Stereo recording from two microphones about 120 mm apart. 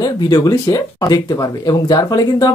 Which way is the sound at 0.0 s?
35° left (ahead or behind).